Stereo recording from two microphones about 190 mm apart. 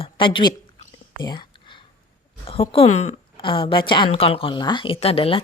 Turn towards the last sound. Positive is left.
turn(degrees=30)  # may be behind; listen again after turning